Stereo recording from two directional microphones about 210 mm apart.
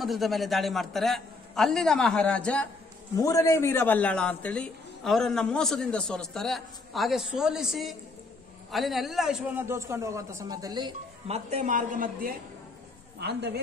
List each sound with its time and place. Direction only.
0.0 s a man's voice: centre (ahead or behind); by 12.4 s 40° right (ahead or behind)
13.2 s a woman's voice: 50° right (ahead or behind)